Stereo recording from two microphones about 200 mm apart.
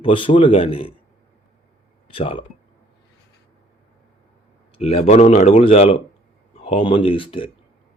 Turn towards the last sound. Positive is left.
turn(degrees=25)  # may be behind; listen again after turning